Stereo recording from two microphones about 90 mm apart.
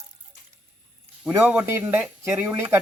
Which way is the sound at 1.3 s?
20° right (ahead or behind).